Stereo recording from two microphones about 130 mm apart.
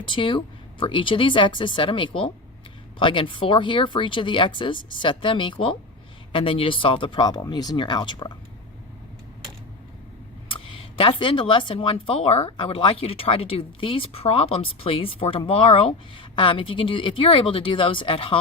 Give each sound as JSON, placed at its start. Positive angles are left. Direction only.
{"t": 0.1, "sound": "speech", "side_deg": 40}
{"t": 10.5, "sound": "speech", "side_deg": 45}